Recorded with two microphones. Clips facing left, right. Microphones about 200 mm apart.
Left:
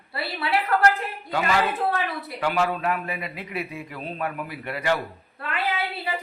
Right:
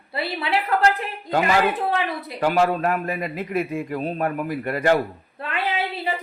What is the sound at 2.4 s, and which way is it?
A man's voice, 40° right (ahead or behind).